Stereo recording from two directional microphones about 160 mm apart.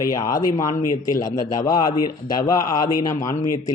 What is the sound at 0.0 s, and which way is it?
Speech, 20° left (ahead or behind).